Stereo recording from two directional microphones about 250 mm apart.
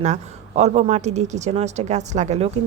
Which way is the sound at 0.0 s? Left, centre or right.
Right.